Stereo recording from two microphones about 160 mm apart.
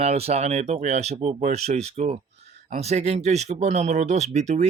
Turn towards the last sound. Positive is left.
turn(degrees=-45)  # may be behind; listen again after turning